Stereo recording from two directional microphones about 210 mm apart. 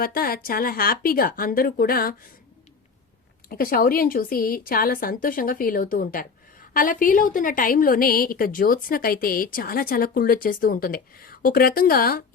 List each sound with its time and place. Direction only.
0.0 s a woman's voice: 45° left (ahead or behind)
3.5 s a woman's voice: 45° left (ahead or behind)